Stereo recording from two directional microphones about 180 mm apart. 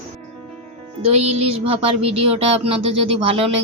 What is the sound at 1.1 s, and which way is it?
Speech, 35° right (ahead or behind).